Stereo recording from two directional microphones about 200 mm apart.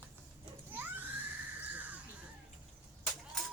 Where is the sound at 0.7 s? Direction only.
10° right (ahead or behind).